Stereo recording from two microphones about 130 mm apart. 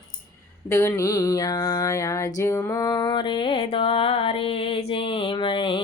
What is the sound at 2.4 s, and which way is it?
Music, 20° left (ahead or behind).